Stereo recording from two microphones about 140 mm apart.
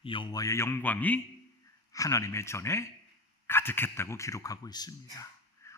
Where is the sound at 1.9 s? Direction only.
25° left (ahead or behind).